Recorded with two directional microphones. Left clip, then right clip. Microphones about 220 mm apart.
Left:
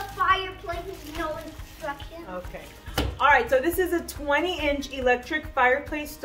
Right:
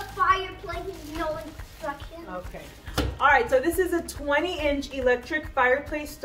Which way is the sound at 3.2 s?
15° left (ahead or behind).